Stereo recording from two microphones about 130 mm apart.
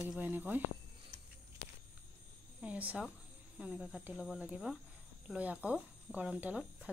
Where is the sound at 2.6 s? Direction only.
10° right (ahead or behind).